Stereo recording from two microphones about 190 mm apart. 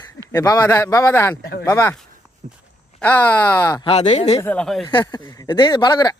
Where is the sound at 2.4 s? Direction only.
40° right (ahead or behind).